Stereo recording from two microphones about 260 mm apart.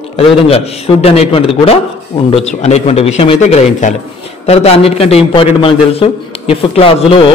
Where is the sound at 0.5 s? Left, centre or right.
Left.